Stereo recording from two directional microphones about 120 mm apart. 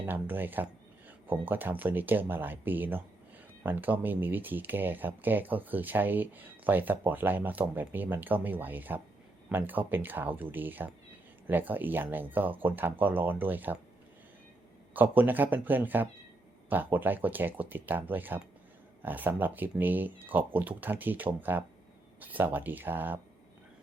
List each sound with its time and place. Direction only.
0.0 s speech: 15° right (ahead or behind)
14.9 s speech: 15° right (ahead or behind)